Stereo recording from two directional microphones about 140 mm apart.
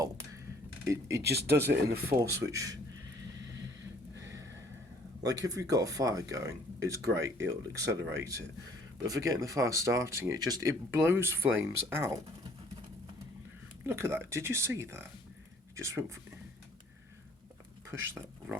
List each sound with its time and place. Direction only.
0.9 s speech: 20° right (ahead or behind)
5.2 s speech: 25° right (ahead or behind)
13.8 s speech: 15° right (ahead or behind)
18.0 s speech: 15° right (ahead or behind)